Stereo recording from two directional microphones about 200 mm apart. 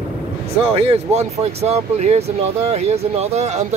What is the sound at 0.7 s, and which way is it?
Speech, 30° right (ahead or behind).